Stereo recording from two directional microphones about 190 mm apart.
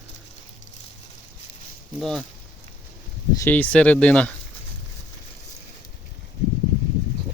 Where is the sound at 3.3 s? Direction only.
10° left (ahead or behind).